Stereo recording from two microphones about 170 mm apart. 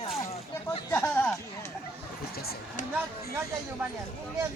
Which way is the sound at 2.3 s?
65° left (ahead or behind).